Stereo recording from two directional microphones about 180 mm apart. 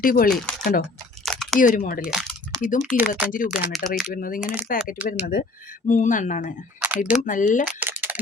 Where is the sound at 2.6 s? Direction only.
45° left (ahead or behind).